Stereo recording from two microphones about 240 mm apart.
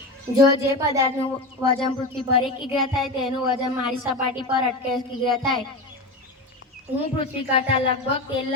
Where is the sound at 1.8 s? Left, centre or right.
Left.